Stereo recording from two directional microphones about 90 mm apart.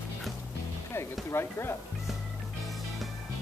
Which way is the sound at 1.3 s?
30° left (ahead or behind).